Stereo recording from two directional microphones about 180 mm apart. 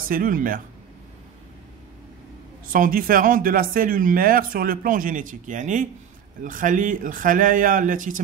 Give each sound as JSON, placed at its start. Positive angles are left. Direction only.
{"t": 0.1, "sound": "speech", "side_deg": -50}
{"t": 2.7, "sound": "speech", "side_deg": -50}